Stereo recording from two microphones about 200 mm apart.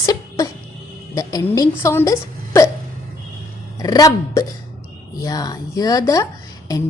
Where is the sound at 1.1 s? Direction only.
15° left (ahead or behind).